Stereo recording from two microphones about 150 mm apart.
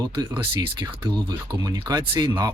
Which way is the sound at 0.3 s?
30° right (ahead or behind).